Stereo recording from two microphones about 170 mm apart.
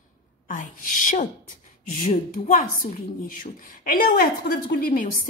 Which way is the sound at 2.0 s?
50° left (ahead or behind).